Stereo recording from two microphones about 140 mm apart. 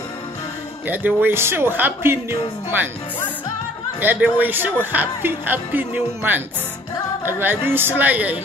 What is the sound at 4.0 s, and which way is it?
A man's voice, 15° right (ahead or behind).